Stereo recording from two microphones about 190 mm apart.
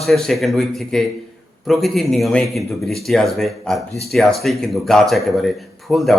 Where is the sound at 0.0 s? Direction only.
Centre (ahead or behind).